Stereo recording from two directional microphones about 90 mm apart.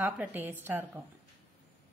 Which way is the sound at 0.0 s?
20° right (ahead or behind).